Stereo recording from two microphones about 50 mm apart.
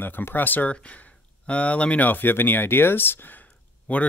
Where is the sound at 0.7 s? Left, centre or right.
Left.